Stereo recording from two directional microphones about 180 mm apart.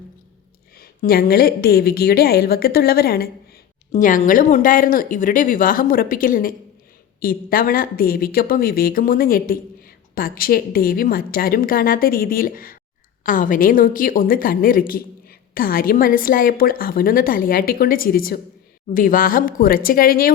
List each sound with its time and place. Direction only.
0.8 s a woman's voice: 55° left (ahead or behind)
3.9 s a woman's voice: 45° left (ahead or behind)